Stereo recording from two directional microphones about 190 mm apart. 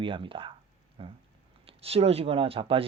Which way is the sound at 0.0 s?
25° right (ahead or behind).